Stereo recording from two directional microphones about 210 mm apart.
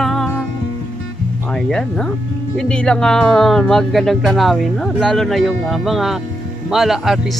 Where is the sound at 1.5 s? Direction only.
5° left (ahead or behind).